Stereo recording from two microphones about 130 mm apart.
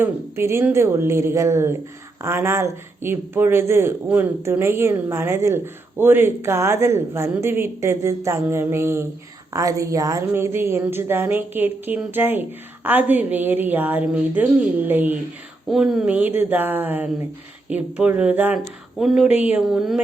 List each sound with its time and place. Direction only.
0.0 s speech: 20° right (ahead or behind)
15.7 s speech: centre (ahead or behind)
16.4 s speech: 15° right (ahead or behind)
18.9 s speech: centre (ahead or behind)
19.4 s speech: 10° right (ahead or behind)
19.6 s speech: centre (ahead or behind)